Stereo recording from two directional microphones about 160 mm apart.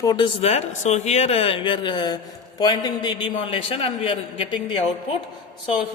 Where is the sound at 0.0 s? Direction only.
25° left (ahead or behind).